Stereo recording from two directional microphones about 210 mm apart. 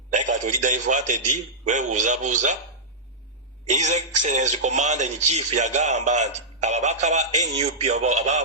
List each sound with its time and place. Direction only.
0.1 s a man's voice: 35° right (ahead or behind)
3.7 s a man's voice: 35° right (ahead or behind)